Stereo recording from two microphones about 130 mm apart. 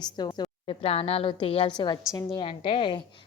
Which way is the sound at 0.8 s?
50° left (ahead or behind).